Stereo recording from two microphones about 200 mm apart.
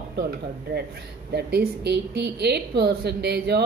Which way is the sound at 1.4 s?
55° right (ahead or behind).